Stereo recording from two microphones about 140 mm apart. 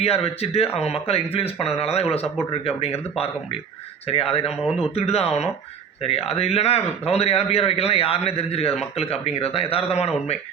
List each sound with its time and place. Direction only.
0.0 s a man's voice: 45° left (ahead or behind)